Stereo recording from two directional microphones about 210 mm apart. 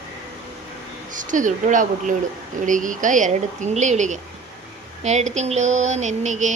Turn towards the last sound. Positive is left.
turn(degrees=-35)  # may be behind; listen again after turning